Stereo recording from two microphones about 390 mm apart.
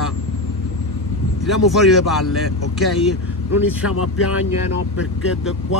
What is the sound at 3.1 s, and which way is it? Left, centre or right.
Speech, left.